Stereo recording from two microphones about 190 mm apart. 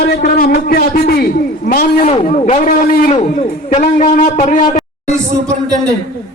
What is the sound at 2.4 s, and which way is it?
A man's voice, 35° left (ahead or behind).